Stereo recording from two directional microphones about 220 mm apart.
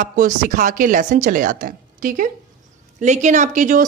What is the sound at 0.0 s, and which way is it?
Speech, 35° right (ahead or behind).